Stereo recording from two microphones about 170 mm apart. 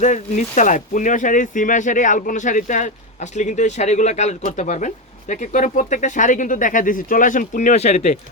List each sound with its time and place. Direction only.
0.0 s speech: 45° left (ahead or behind)